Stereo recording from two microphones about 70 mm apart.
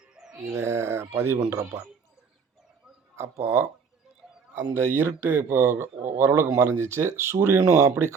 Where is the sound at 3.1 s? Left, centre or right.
Right.